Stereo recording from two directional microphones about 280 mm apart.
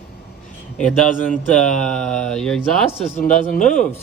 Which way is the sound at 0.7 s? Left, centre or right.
Centre.